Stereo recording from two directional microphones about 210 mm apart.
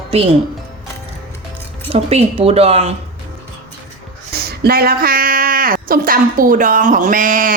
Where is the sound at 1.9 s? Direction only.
30° right (ahead or behind).